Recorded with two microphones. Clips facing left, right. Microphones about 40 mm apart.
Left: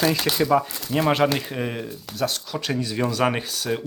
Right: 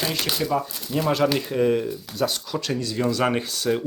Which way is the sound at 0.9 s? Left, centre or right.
Left.